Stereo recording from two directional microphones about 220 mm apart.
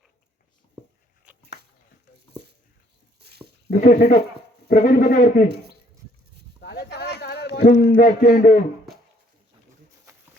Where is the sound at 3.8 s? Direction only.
35° left (ahead or behind).